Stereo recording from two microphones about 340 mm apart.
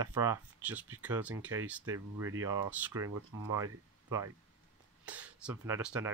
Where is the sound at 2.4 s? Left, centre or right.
Centre.